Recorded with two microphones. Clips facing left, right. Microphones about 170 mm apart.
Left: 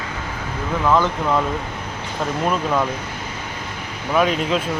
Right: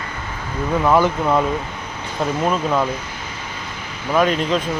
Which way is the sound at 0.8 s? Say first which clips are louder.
Right 2 dB; 15° right (ahead or behind).